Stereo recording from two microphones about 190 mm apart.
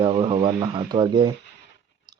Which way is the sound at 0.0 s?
25° right (ahead or behind).